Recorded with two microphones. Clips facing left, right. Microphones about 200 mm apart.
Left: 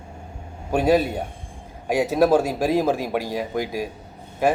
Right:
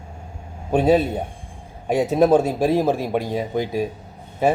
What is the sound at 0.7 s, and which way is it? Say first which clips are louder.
Speech: right 2 dB; 10° left (ahead or behind).